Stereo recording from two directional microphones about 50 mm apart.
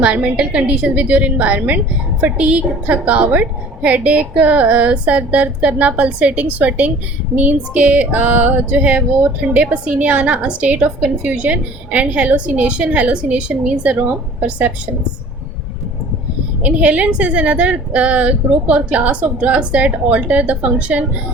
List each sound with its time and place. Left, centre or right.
0.0 s female singing: right
16.6 s female singing: right